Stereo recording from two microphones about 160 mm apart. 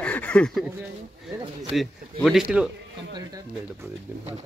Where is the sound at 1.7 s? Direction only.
Centre (ahead or behind).